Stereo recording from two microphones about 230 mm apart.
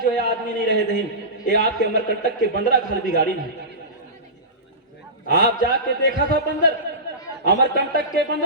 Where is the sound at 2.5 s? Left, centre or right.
Right.